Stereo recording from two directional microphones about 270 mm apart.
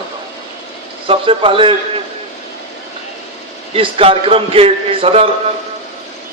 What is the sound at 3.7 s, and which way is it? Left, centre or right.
A man's voice, right.